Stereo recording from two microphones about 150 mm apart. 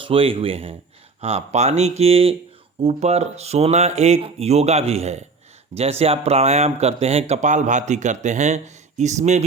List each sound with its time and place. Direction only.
0.0 s speech: 40° right (ahead or behind)